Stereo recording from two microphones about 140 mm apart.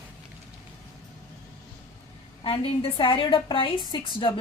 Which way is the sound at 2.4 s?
40° left (ahead or behind).